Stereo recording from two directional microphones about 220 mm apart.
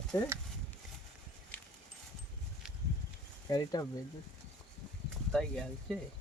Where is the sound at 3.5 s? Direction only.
15° left (ahead or behind).